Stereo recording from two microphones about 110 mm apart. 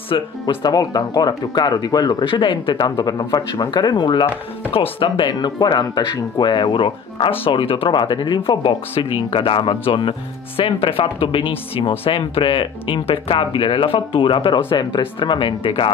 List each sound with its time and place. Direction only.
0.1 s speech: 50° left (ahead or behind)